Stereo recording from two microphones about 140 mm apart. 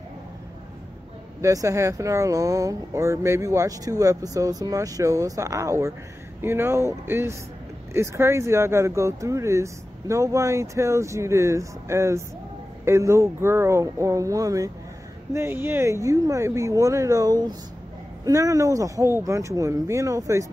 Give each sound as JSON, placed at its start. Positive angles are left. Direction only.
{"t": 1.4, "sound": "speech", "side_deg": -20}